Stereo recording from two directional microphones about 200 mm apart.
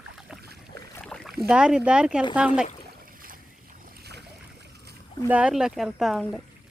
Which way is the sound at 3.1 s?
45° right (ahead or behind).